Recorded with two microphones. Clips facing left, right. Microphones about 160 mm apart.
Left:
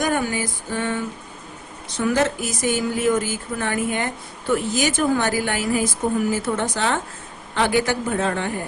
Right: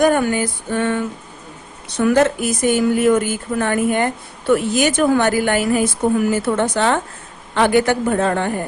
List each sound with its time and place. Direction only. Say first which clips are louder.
0.0 s a woman's voice: right 7 dB; 60° right (ahead or behind)
4.5 s a woman's voice: right 5 dB; 65° right (ahead or behind)